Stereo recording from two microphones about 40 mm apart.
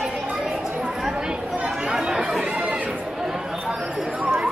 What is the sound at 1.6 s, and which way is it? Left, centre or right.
Chatter, centre.